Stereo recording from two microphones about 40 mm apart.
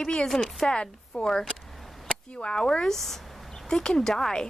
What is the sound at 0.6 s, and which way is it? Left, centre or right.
A woman's voice, left.